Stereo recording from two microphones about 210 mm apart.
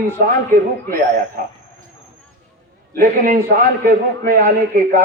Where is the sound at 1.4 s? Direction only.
45° right (ahead or behind).